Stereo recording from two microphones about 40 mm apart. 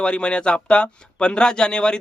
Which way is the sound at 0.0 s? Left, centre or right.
Left.